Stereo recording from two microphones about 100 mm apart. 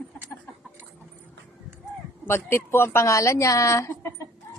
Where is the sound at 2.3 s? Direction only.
25° left (ahead or behind).